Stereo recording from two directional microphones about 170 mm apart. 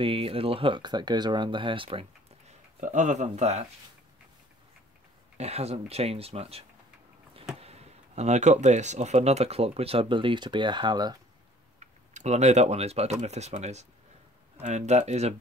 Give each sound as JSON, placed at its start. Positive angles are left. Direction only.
{"t": 0.0, "sound": "speech", "side_deg": -35}
{"t": 2.8, "sound": "speech", "side_deg": -45}
{"t": 5.4, "sound": "speech", "side_deg": -40}
{"t": 11.8, "sound": "speech", "side_deg": -45}